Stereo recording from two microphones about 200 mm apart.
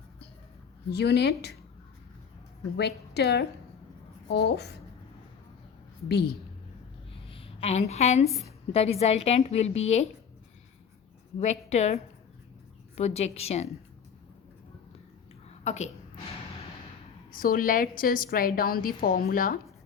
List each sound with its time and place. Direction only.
0.9 s a woman's voice: 55° left (ahead or behind)
2.7 s a woman's voice: 55° left (ahead or behind)
6.1 s a woman's voice: 55° left (ahead or behind)
7.3 s a woman's voice: 30° left (ahead or behind)
11.3 s a woman's voice: 35° left (ahead or behind)
15.6 s a woman's voice: 35° left (ahead or behind)
17.3 s a woman's voice: 45° left (ahead or behind)